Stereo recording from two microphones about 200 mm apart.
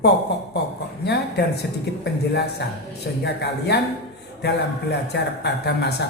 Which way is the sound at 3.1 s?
55° left (ahead or behind).